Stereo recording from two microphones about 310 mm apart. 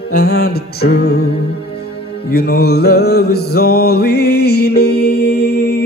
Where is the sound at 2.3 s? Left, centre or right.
Left.